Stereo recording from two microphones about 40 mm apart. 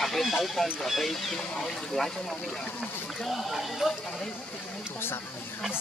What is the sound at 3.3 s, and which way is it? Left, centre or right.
Speech, centre.